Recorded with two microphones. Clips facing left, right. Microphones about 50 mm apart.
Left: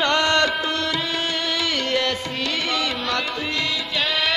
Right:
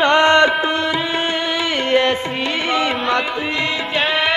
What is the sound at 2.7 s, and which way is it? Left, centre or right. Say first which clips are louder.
Music: right 6 dB; right.